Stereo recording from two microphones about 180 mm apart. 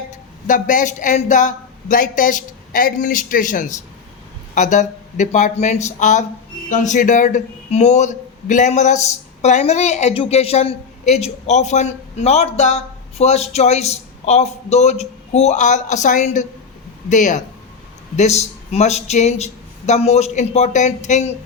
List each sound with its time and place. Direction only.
0.1 s a man's voice: 45° left (ahead or behind)